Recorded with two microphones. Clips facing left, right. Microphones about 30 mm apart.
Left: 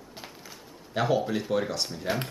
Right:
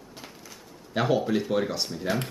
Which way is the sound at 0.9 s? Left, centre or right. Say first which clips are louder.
Right 2 dB; centre.